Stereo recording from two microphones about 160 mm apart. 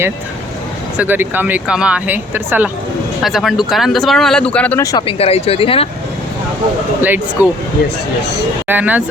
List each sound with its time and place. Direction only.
0.9 s speech: 10° right (ahead or behind)
3.2 s speech: centre (ahead or behind)
4.8 s speech: 20° left (ahead or behind)
5.0 s speech: 40° left (ahead or behind)
7.0 s speech: 10° right (ahead or behind)
8.6 s speech: 10° right (ahead or behind)